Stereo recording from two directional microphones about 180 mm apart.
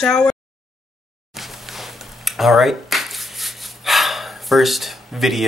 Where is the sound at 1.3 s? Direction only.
Centre (ahead or behind).